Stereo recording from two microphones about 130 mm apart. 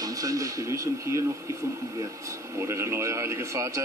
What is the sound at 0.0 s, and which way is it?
A man's voice, 25° right (ahead or behind).